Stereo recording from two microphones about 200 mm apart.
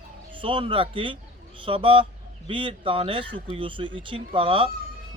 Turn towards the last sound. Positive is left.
turn(degrees=-25)  # may be behind; listen again after turning